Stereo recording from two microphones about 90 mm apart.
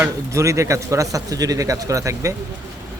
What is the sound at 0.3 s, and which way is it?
Speech, 35° right (ahead or behind).